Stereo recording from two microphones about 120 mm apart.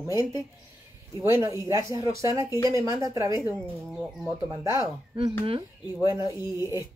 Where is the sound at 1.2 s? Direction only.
25° right (ahead or behind).